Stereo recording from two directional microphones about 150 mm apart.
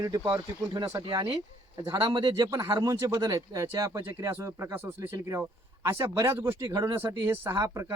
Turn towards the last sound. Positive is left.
turn(degrees=-20)  # may be behind; listen again after turning